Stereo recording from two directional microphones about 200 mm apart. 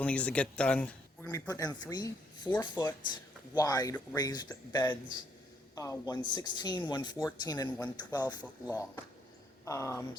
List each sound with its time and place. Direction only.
0.0 s speech: 5° left (ahead or behind)
9.6 s speech: 15° left (ahead or behind)